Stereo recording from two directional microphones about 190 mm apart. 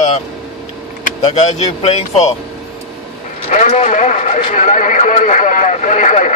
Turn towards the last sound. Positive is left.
turn(degrees=40)  # may be behind; listen again after turning